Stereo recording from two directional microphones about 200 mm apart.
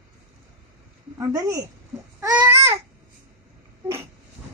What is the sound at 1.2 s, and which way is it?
Speech, 15° right (ahead or behind).